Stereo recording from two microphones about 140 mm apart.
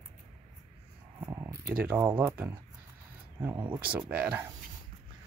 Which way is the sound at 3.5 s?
30° right (ahead or behind).